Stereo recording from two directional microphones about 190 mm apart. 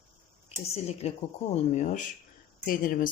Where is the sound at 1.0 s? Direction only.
35° left (ahead or behind).